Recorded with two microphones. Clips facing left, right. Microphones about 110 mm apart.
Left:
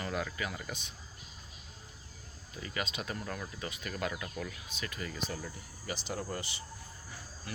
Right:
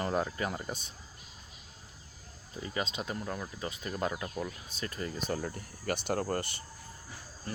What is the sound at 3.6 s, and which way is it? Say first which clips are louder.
Speech: right 4 dB; 25° right (ahead or behind).